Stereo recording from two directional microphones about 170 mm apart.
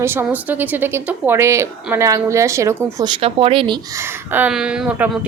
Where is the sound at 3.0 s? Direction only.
35° right (ahead or behind).